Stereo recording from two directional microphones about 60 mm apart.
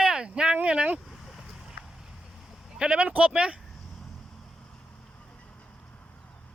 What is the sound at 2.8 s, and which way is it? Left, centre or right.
Speech, right.